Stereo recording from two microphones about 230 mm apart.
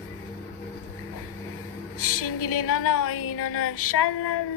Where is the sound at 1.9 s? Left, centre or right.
Left.